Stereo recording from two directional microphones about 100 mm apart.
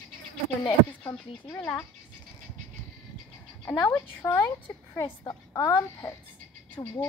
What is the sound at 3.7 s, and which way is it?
A woman's voice, 40° left (ahead or behind).